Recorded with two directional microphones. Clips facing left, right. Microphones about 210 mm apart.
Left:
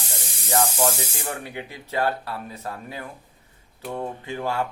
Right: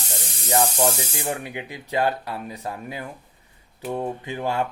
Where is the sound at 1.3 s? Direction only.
15° right (ahead or behind).